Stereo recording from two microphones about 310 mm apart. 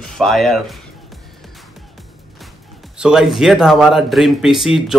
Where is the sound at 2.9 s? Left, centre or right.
Centre.